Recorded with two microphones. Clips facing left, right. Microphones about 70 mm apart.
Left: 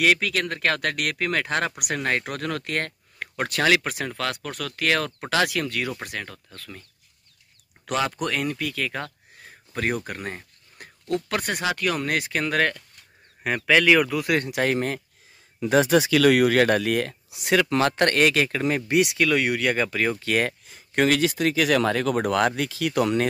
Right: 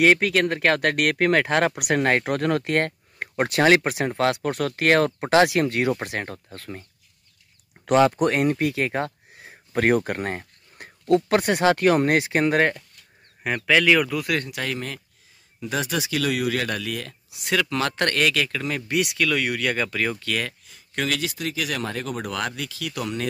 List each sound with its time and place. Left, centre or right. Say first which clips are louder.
0.0 s speech: right 4 dB; right
9.4 s a sound: right 2 dB; centre
9.8 s speech: right 7 dB; right
13.4 s speech: even; centre
14.6 s speech: left 6 dB; left
16.1 s speech: left 6 dB; left
17.3 s speech: left 2 dB; centre
18.2 s speech: left 2 dB; left; by 20.2 s centre
20.2 s speech: left 4 dB; left
22.2 s speech: left 7 dB; left